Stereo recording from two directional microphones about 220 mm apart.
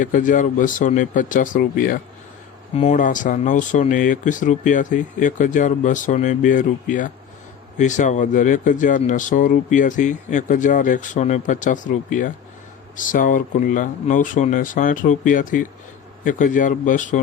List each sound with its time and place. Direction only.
0.0 s speech: 35° left (ahead or behind)